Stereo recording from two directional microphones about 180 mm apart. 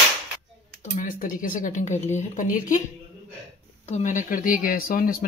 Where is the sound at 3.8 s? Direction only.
40° left (ahead or behind).